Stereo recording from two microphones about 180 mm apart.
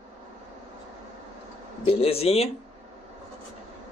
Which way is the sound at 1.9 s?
35° left (ahead or behind).